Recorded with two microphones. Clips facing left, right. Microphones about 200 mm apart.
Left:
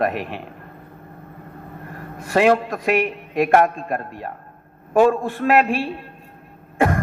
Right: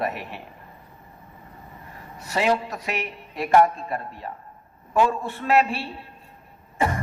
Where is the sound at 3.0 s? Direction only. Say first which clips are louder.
Left 10 dB; 90° left.